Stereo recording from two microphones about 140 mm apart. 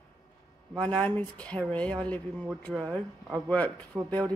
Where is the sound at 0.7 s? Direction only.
10° left (ahead or behind).